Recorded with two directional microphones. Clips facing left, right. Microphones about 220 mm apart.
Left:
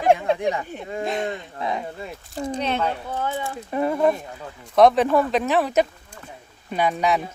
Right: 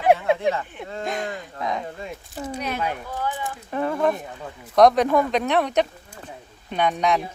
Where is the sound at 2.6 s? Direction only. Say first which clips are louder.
Left 4 dB; 25° left (ahead or behind).